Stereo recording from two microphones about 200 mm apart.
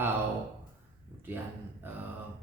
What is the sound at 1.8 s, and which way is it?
Speech, 10° right (ahead or behind).